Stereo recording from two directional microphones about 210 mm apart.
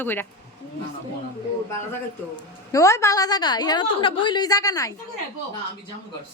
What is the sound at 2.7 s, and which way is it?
A woman's voice, 15° left (ahead or behind).